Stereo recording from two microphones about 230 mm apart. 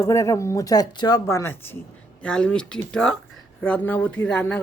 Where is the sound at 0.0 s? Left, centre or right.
Centre.